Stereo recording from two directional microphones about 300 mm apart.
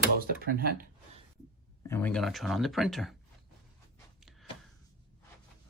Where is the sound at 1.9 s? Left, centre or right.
Centre.